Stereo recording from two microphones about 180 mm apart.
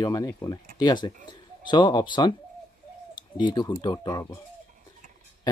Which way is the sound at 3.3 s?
25° left (ahead or behind).